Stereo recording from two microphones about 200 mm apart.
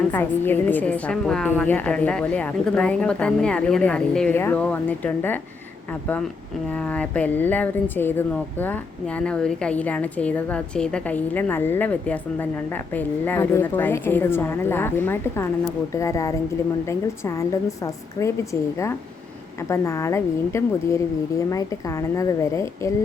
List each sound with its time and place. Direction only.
0.1 s a woman's voice: 10° left (ahead or behind)
19.6 s a woman's voice: 15° left (ahead or behind)